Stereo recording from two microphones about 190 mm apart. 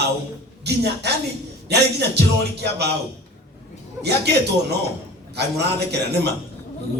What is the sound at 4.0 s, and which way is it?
Speech, 60° right (ahead or behind).